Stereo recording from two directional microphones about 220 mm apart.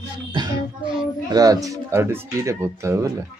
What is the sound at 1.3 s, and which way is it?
A man's voice, 15° right (ahead or behind).